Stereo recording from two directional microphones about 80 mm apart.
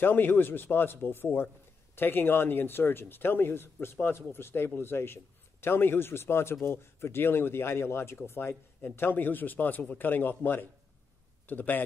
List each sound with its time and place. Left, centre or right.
0.0 s speech: left